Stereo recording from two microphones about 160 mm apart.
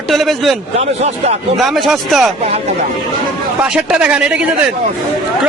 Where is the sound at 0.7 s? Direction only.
40° right (ahead or behind).